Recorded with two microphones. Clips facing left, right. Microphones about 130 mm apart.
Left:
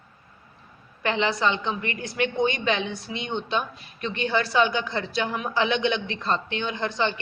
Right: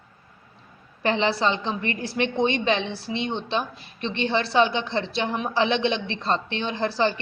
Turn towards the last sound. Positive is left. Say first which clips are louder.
# right 3 dB
turn(degrees=-35)  # may be behind; listen again after turning